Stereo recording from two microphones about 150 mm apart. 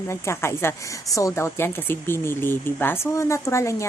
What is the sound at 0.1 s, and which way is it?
A woman's voice, 15° left (ahead or behind).